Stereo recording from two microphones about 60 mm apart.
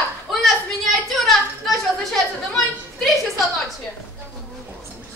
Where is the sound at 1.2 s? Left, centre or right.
Centre.